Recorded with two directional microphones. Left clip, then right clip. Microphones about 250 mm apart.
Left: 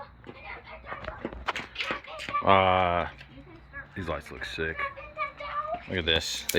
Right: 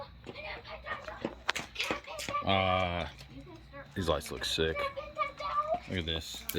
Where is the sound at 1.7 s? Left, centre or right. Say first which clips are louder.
Left 2 dB; right.